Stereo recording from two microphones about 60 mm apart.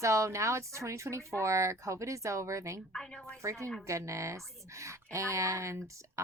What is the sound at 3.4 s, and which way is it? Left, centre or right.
A woman's voice, right.